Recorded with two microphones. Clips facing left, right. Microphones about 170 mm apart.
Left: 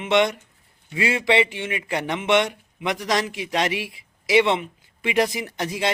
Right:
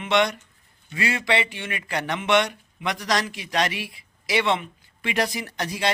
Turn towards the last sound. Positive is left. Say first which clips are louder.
# left 1 dB
turn(degrees=20)  # may be behind; listen again after turning